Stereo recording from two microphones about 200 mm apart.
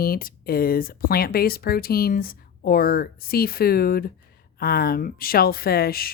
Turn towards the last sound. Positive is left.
turn(degrees=50)  # may be behind; listen again after turning